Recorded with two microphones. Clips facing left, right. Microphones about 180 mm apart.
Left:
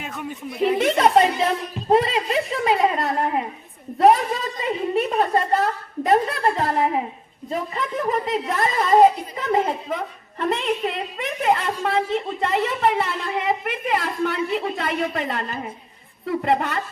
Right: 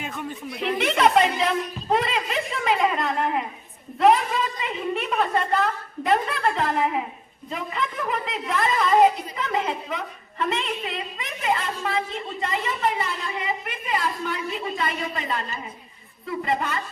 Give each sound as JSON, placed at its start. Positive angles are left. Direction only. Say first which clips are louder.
{"t": 0.0, "sound": "speech", "louder": "left 1 dB", "side_deg": 5}
{"t": 0.8, "sound": "a woman's voice", "louder": "left 1 dB", "side_deg": 40}